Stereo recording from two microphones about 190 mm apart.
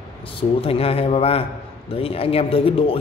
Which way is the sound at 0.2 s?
30° left (ahead or behind).